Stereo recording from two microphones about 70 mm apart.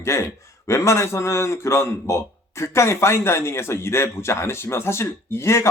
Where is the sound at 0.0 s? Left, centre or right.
Left.